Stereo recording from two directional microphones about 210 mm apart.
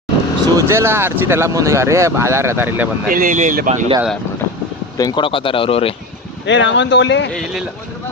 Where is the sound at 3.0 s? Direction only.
40° right (ahead or behind).